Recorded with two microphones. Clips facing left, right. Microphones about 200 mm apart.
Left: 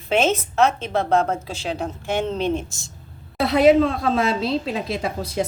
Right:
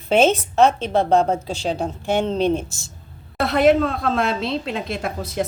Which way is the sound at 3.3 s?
Centre (ahead or behind).